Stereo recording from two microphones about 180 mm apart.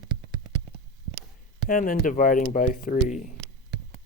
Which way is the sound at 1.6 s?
50° left (ahead or behind).